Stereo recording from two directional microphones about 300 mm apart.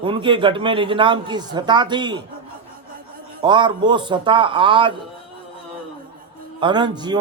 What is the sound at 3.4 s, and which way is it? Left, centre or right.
Speech, centre.